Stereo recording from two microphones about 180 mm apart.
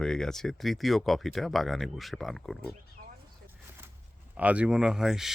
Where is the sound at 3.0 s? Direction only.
40° right (ahead or behind).